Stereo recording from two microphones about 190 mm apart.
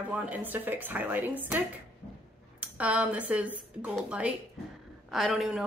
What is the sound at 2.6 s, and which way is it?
Speech, 5° right (ahead or behind).